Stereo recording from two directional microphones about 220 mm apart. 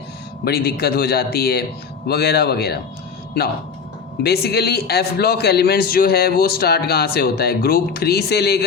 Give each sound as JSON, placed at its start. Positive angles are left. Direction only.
{"t": 0.4, "sound": "a man's voice", "side_deg": 45}
{"t": 4.2, "sound": "a man's voice", "side_deg": 45}